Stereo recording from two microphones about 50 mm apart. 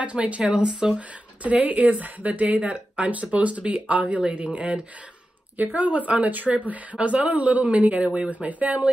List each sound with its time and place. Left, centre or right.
0.0 s speech: right